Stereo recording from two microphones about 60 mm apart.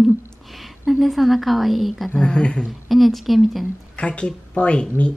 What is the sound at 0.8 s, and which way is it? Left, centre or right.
A woman's voice, centre.